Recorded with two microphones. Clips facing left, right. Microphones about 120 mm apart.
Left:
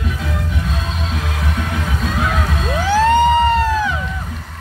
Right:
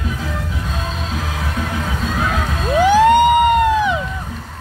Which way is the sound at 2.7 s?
15° right (ahead or behind).